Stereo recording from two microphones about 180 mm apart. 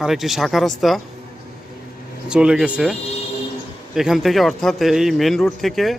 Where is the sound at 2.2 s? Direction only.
5° right (ahead or behind).